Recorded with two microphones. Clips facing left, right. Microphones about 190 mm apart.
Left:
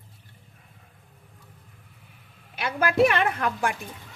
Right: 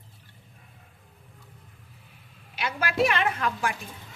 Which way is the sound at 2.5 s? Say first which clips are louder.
Left 5 dB; 55° left (ahead or behind).